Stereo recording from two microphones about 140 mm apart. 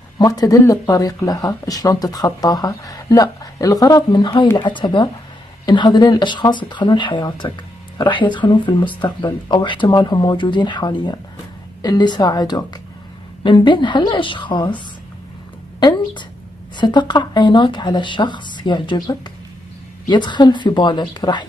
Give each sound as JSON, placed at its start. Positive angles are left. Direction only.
{"t": 0.2, "sound": "speech", "side_deg": 25}
{"t": 15.8, "sound": "speech", "side_deg": 35}